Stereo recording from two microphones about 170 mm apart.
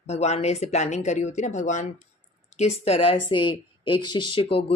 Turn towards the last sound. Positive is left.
turn(degrees=30)  # may be behind; listen again after turning